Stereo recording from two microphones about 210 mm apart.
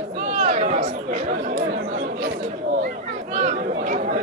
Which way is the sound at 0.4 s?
35° right (ahead or behind).